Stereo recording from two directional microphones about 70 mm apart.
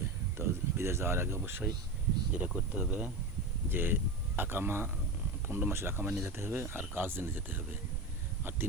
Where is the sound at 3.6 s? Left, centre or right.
Right.